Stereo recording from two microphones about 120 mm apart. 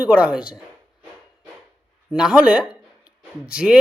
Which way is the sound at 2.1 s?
5° right (ahead or behind).